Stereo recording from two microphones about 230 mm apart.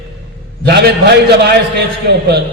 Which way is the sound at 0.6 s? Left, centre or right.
Right.